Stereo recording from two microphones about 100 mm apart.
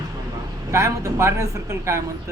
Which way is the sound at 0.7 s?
30° right (ahead or behind).